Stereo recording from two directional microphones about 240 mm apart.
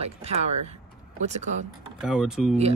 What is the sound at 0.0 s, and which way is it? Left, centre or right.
Speech, right.